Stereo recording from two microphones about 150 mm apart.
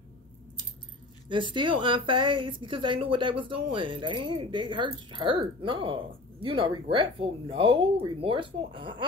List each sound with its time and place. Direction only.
1.3 s a woman's voice: 30° right (ahead or behind)